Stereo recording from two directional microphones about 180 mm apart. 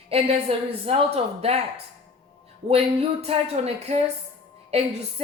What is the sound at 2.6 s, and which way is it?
A woman's voice, 35° right (ahead or behind).